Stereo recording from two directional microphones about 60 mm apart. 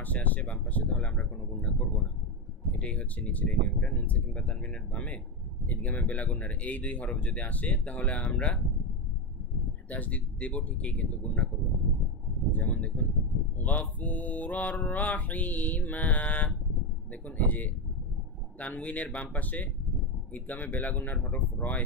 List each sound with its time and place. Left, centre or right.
0.0 s mantra: left
9.8 s mantra: left
12.5 s mantra: left